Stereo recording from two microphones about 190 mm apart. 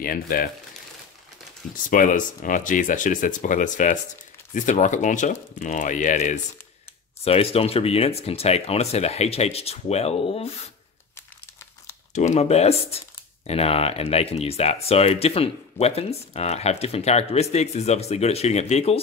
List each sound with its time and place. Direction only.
0.0 s speech: 50° left (ahead or behind)
1.9 s speech: 45° left (ahead or behind)
12.1 s speech: 40° left (ahead or behind)